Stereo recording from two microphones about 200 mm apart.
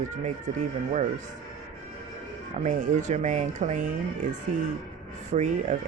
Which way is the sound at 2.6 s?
35° right (ahead or behind).